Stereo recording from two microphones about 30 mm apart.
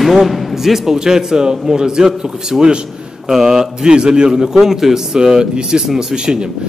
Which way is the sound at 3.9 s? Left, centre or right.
Right.